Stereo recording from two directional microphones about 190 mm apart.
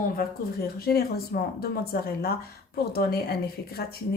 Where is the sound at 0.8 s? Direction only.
50° left (ahead or behind).